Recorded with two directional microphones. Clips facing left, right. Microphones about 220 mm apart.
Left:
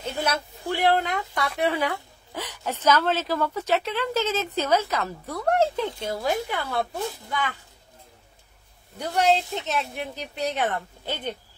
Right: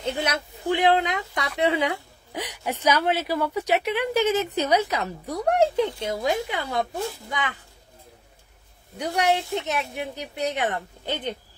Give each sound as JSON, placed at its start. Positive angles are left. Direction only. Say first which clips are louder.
{"t": 0.0, "sound": "a woman's voice", "louder": "right 1 dB", "side_deg": -15}
{"t": 8.9, "sound": "a woman's voice", "louder": "left 1 dB", "side_deg": -15}